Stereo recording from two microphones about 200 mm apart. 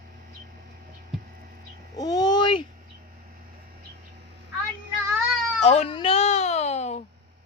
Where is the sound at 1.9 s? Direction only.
20° left (ahead or behind).